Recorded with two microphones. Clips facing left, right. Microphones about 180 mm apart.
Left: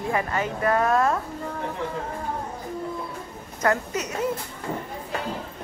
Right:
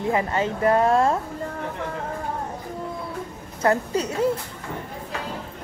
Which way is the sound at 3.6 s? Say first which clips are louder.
Right 3 dB; 30° right (ahead or behind).